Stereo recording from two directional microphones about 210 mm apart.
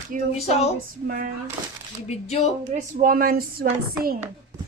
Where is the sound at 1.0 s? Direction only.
40° right (ahead or behind).